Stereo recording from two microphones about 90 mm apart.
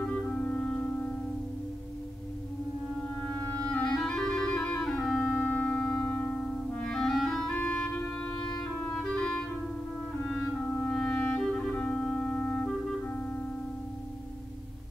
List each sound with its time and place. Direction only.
0.1 s organ: 15° left (ahead or behind)
3.8 s clarinet: 5° left (ahead or behind)
5.2 s organ: 20° left (ahead or behind)
6.8 s clarinet: 5° left (ahead or behind)
10.7 s clarinet: 20° left (ahead or behind)
11.0 s clarinet: 10° left (ahead or behind)